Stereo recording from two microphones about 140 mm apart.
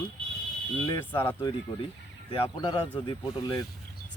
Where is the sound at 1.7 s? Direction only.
30° left (ahead or behind).